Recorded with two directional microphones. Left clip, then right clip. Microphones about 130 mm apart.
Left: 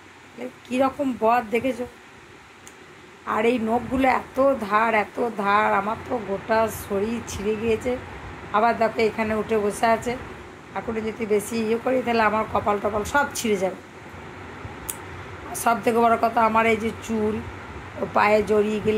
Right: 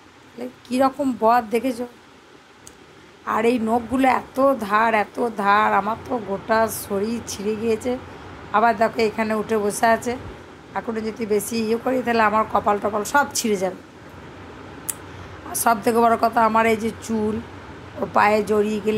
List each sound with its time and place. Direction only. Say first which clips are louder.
0.4 s a woman's voice: right 3 dB; 20° right (ahead or behind)
3.3 s a woman's voice: right 2 dB; 20° right (ahead or behind)
15.5 s a woman's voice: right 2 dB; 20° right (ahead or behind)
18.1 s a woman's voice: right 1 dB; 20° right (ahead or behind)